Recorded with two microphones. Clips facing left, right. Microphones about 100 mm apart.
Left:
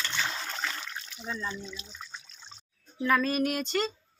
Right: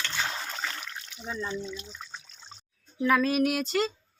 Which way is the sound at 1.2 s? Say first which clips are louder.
Right 2 dB; 15° right (ahead or behind).